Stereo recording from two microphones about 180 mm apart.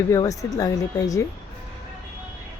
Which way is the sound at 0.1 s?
20° left (ahead or behind).